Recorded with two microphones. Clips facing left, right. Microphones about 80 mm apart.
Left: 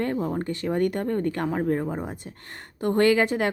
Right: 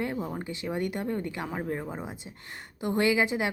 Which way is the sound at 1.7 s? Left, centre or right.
Centre.